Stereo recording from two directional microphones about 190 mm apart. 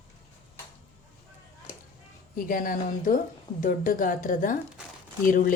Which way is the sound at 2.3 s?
45° left (ahead or behind).